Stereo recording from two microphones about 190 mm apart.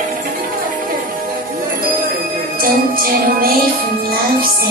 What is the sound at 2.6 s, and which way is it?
Music, 50° right (ahead or behind).